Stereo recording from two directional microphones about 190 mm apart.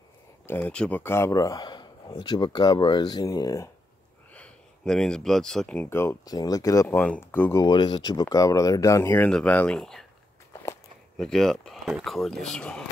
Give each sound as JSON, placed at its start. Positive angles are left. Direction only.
{"t": 0.5, "sound": "speech", "side_deg": 5}
{"t": 4.3, "sound": "speech", "side_deg": 5}
{"t": 7.6, "sound": "speech", "side_deg": 25}
{"t": 10.5, "sound": "walk", "side_deg": 15}
{"t": 11.1, "sound": "speech", "side_deg": 0}